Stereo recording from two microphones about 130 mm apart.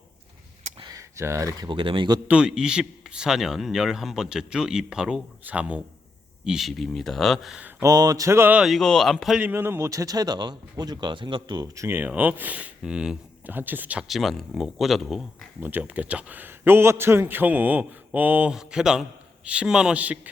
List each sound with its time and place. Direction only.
0.9 s speech: 20° right (ahead or behind)
1.7 s speech: 40° right (ahead or behind)
2.2 s a man's voice: 5° right (ahead or behind)
7.8 s speech: 30° right (ahead or behind)
8.6 s a man's voice: centre (ahead or behind)
9.4 s speech: 15° right (ahead or behind)
14.1 s a man's voice: centre (ahead or behind)
15.6 s a man's voice: 15° right (ahead or behind)